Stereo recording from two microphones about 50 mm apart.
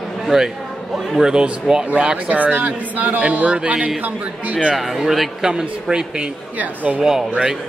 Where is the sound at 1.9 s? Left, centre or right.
Right.